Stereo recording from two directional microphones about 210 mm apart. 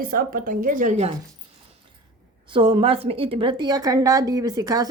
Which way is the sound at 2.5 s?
25° right (ahead or behind).